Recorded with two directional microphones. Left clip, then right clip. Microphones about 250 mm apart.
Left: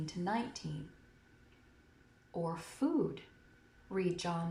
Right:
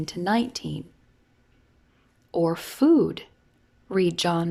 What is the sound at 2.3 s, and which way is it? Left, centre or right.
A woman's voice, right.